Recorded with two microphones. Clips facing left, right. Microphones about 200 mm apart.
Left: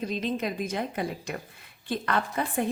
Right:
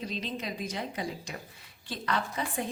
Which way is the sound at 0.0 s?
50° left (ahead or behind).